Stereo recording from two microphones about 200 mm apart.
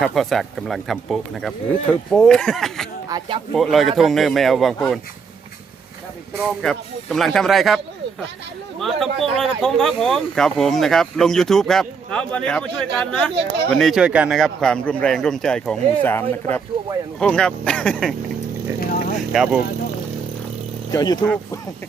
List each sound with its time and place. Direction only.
0.0 s speech: centre (ahead or behind)
3.1 s speech: 25° right (ahead or behind)
3.5 s speech: centre (ahead or behind)
6.3 s speech: centre (ahead or behind)
8.8 s speech: centre (ahead or behind)
19.3 s speech: 5° right (ahead or behind)
20.9 s speech: 20° left (ahead or behind)